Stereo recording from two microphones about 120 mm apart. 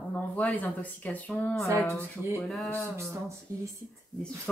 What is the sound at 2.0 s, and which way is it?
Speech, 25° right (ahead or behind).